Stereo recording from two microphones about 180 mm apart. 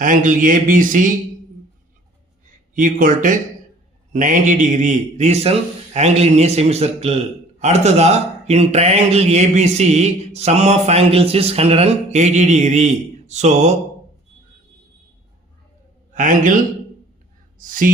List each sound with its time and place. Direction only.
0.0 s speech: 45° right (ahead or behind)
2.7 s a man's voice: 45° right (ahead or behind)
16.1 s speech: 45° right (ahead or behind)
17.6 s speech: 50° right (ahead or behind)